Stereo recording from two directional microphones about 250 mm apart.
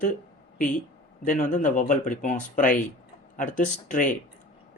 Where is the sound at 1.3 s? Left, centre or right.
Left.